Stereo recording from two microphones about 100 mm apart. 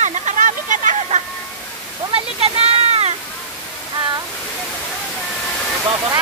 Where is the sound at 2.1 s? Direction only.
75° right (ahead or behind).